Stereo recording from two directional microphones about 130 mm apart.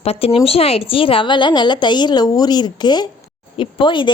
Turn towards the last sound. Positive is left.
turn(degrees=40)  # may be behind; listen again after turning